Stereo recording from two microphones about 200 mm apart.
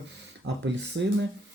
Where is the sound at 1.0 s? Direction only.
60° right (ahead or behind).